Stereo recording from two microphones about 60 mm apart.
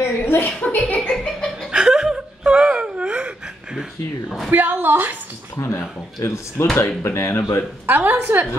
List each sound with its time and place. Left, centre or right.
0.0 s a woman's voice: left
0.5 s speech: left
1.1 s laughter: centre
1.7 s wail: centre
4.5 s a woman's voice: right
5.6 s speech: left
7.8 s a woman's voice: right